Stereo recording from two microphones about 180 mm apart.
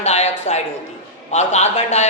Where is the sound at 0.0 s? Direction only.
35° left (ahead or behind).